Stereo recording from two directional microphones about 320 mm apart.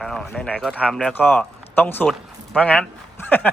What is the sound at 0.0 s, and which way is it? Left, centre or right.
A man's voice, centre.